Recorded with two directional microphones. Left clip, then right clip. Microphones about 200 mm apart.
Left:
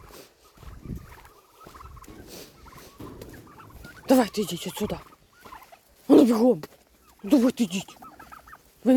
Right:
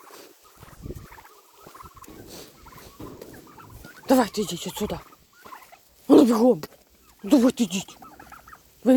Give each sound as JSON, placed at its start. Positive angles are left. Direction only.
{"t": 2.2, "sound": "turkey", "side_deg": 15}
{"t": 6.1, "sound": "a sound", "side_deg": 5}
{"t": 7.2, "sound": "speech", "side_deg": -5}